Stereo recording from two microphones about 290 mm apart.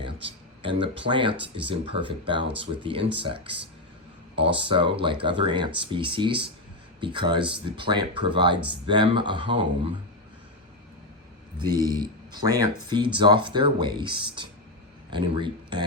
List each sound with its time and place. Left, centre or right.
0.0 s speech: centre
11.6 s speech: centre